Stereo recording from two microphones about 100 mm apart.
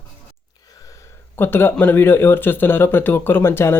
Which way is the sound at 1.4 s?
25° left (ahead or behind).